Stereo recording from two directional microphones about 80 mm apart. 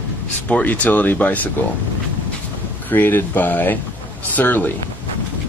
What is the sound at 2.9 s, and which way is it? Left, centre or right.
Speech, left.